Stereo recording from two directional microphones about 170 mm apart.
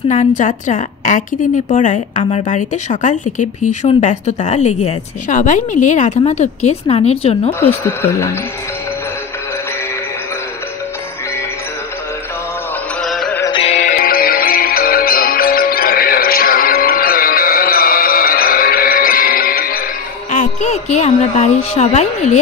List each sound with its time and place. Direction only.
0.1 s a woman's voice: 45° left (ahead or behind)
7.8 s speech: 15° left (ahead or behind)
13.0 s music: centre (ahead or behind)
13.5 s music: 35° left (ahead or behind)
13.9 s music: 60° left (ahead or behind)
20.2 s a woman's voice: 45° left (ahead or behind)